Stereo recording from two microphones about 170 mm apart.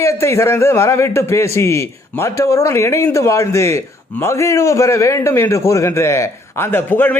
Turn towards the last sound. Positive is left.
turn(degrees=10)  # may be behind; listen again after turning